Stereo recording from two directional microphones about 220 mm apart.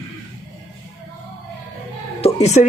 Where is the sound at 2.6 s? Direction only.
35° left (ahead or behind).